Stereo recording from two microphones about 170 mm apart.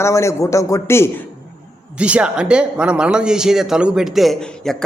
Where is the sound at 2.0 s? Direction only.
5° right (ahead or behind).